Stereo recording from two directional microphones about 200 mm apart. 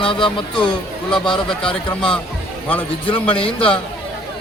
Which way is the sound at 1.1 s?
5° left (ahead or behind).